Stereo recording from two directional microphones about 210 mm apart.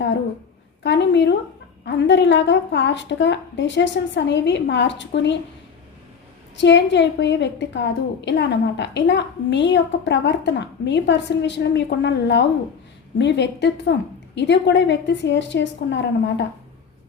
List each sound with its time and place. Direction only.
0.8 s a woman's voice: 55° left (ahead or behind)
6.6 s a woman's voice: 60° left (ahead or behind)